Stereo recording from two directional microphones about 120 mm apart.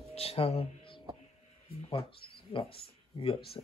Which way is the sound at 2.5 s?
50° left (ahead or behind).